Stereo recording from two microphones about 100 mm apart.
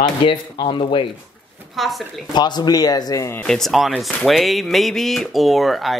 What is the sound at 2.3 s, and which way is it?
Speech, 45° left (ahead or behind).